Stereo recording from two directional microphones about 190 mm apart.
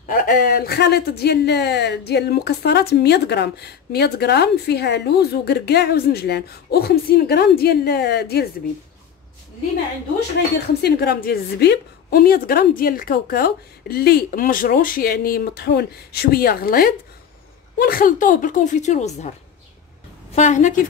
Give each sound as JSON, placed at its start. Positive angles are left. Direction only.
{"t": 0.1, "sound": "speech", "side_deg": 45}
{"t": 10.8, "sound": "a woman's voice", "side_deg": 55}
{"t": 20.3, "sound": "a woman's voice", "side_deg": 40}